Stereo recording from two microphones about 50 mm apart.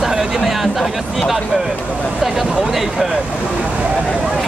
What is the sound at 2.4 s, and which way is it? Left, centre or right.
Speech, centre.